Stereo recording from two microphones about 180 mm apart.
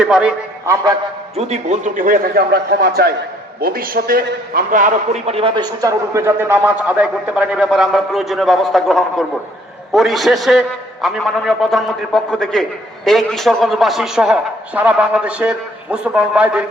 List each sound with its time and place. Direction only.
0.0 s a man's voice: 5° right (ahead or behind)
0.6 s a man's voice: 15° right (ahead or behind)
1.4 s a man's voice: 40° right (ahead or behind); by 16.6 s 5° right (ahead or behind)